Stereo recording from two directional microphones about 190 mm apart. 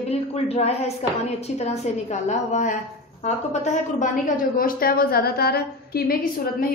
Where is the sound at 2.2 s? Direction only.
40° left (ahead or behind).